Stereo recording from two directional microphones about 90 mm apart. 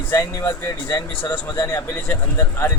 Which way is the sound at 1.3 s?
20° left (ahead or behind).